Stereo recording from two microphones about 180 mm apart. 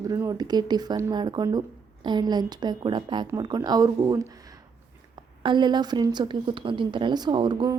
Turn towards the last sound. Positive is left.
turn(degrees=-25)  # may be behind; listen again after turning